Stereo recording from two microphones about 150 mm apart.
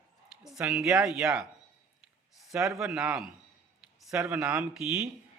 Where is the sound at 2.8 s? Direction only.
5° right (ahead or behind).